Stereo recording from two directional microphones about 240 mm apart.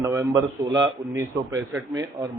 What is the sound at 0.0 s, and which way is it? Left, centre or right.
A man's voice, centre.